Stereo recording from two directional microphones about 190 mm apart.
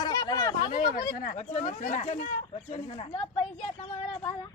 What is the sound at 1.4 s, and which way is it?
Speech, 40° left (ahead or behind).